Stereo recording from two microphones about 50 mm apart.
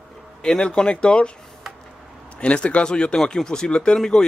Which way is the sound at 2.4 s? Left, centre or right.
Left.